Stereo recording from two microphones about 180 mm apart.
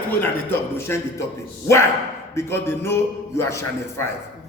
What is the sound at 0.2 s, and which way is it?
Speech, 10° left (ahead or behind).